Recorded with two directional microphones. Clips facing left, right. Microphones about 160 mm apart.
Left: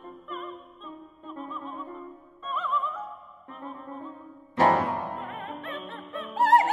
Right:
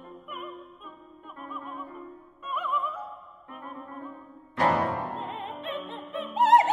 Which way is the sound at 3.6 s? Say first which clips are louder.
Left 2 dB; 25° left (ahead or behind).